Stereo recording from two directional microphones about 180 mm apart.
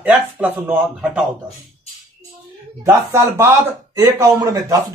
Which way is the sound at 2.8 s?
15° right (ahead or behind).